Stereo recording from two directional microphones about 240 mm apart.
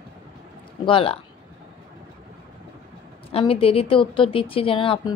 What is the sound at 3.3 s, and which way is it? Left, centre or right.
A woman's voice, left.